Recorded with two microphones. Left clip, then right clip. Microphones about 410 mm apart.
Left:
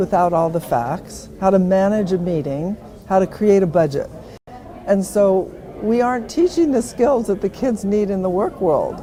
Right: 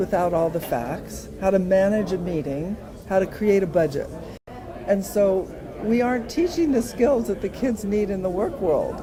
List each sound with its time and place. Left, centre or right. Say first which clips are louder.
0.0 s a woman's voice: left 5 dB; left